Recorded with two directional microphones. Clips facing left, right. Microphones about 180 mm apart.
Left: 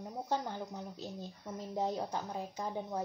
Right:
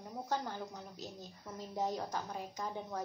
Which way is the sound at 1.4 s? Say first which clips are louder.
Left 2 dB; 25° left (ahead or behind).